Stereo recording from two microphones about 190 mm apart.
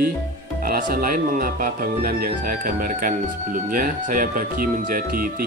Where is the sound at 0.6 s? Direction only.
50° right (ahead or behind).